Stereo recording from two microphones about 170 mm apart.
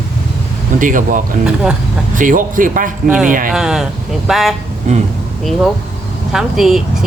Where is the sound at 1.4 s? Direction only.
5° right (ahead or behind).